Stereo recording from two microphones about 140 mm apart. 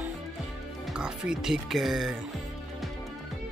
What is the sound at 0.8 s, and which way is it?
Speech, 5° right (ahead or behind).